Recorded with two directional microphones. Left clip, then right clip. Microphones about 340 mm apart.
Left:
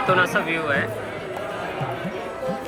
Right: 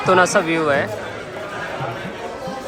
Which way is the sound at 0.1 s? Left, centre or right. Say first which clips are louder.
Right 6 dB; centre.